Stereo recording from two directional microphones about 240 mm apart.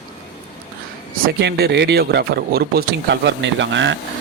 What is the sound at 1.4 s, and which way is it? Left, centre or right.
A man's voice, right.